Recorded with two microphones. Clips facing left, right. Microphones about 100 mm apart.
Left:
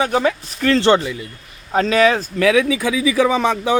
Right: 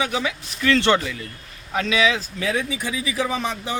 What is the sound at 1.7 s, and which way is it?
Speech, 40° left (ahead or behind).